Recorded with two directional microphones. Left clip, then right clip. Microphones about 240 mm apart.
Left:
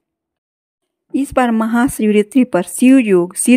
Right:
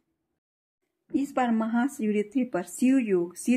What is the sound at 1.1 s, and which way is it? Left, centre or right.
Speech, left.